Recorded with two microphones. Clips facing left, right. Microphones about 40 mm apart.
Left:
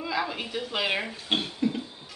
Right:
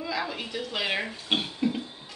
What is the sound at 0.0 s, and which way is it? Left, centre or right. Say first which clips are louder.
Speech: left 2 dB; centre.